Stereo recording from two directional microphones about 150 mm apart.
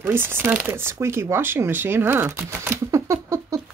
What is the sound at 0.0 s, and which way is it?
Speech, 15° right (ahead or behind).